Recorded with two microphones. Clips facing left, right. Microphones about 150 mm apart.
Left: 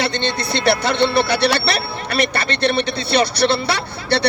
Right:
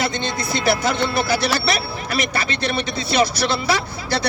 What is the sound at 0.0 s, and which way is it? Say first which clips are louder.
Speech: left 2 dB; 65° left (ahead or behind).